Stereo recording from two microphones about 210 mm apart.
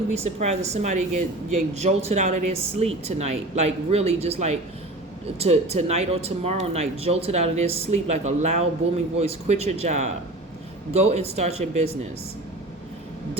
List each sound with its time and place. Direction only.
0.1 s speech: 30° right (ahead or behind)